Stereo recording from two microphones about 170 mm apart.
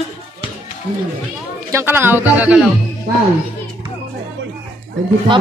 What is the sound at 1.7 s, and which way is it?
Speech, 15° right (ahead or behind).